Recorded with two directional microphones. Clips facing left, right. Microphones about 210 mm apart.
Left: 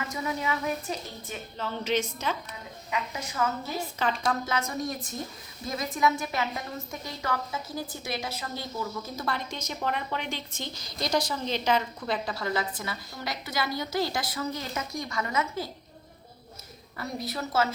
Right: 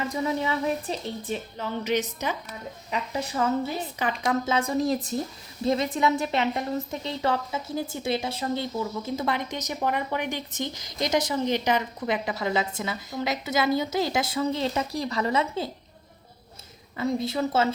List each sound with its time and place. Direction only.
0.1 s a woman's voice: 30° right (ahead or behind)
1.5 s a woman's voice: 15° right (ahead or behind)
2.9 s a woman's voice: 35° right (ahead or behind)
3.8 s a woman's voice: 15° right (ahead or behind)
17.1 s a woman's voice: 25° right (ahead or behind)